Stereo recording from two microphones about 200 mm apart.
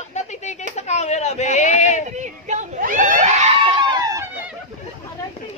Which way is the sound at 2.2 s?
35° right (ahead or behind).